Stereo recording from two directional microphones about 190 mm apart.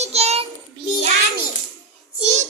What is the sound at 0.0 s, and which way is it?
Child singing, 35° right (ahead or behind).